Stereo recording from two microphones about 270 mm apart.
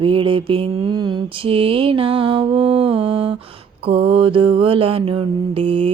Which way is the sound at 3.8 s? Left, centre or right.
Centre.